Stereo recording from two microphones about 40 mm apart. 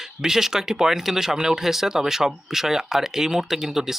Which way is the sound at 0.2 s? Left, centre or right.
Centre.